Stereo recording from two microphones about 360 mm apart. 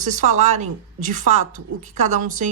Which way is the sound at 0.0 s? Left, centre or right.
Right.